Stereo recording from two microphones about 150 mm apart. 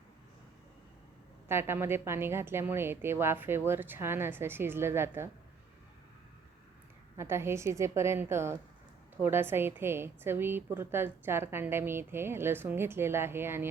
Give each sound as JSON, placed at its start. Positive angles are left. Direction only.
{"t": 1.5, "sound": "a woman's voice", "side_deg": -15}
{"t": 7.2, "sound": "a woman's voice", "side_deg": -15}